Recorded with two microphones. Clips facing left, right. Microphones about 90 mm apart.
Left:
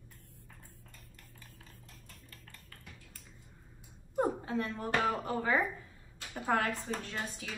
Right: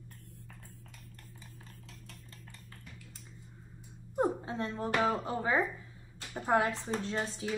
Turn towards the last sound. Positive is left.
turn(degrees=-25)  # may be behind; listen again after turning